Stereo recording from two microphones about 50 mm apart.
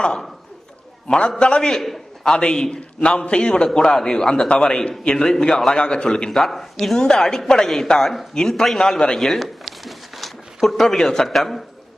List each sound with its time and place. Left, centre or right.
1.0 s a man's voice: centre
1.7 s a man's voice: centre
2.2 s a man's voice: centre
6.3 s a man's voice: centre
8.3 s a man's voice: centre
9.4 s a sound: centre